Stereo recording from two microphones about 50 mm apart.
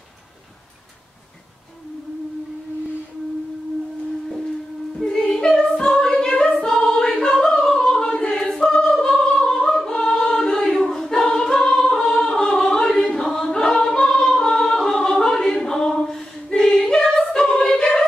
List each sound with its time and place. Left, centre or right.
5.0 s female singing: centre
5.7 s a capella: centre
6.8 s choir: centre
7.2 s a sound: centre
7.6 s choir: centre
16.8 s singing: centre